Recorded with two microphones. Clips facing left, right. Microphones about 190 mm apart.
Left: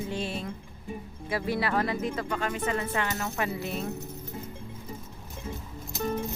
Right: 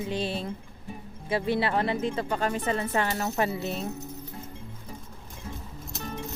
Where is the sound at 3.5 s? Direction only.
25° right (ahead or behind).